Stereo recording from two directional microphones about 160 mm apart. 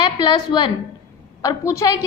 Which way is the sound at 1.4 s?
20° left (ahead or behind).